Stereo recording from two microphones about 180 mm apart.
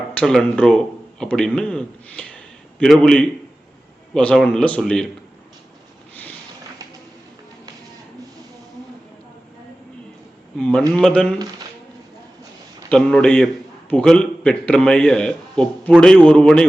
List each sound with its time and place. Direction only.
0.1 s a man's voice: 5° left (ahead or behind)
10.6 s a man's voice: 5° left (ahead or behind)
12.9 s a man's voice: 5° left (ahead or behind)